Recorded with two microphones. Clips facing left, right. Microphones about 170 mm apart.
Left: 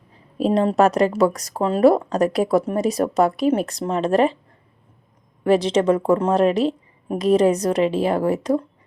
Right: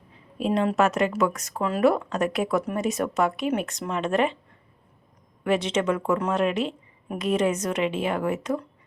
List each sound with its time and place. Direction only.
0.1 s speech: 35° left (ahead or behind)
5.4 s speech: 35° left (ahead or behind)